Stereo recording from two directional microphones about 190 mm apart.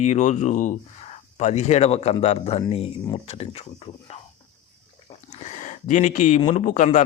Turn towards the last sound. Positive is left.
turn(degrees=40)  # may be behind; listen again after turning